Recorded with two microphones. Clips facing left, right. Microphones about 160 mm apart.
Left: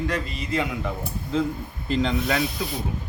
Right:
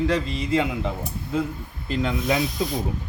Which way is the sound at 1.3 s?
10° right (ahead or behind).